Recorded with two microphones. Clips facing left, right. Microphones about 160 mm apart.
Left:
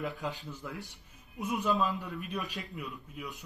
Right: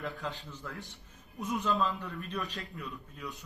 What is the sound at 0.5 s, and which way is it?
A man's voice, 15° left (ahead or behind).